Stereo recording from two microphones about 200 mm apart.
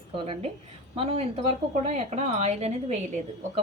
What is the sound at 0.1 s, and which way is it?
A woman's voice, 30° right (ahead or behind).